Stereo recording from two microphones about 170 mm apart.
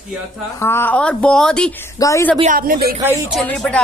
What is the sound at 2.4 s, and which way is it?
Speech, 55° right (ahead or behind).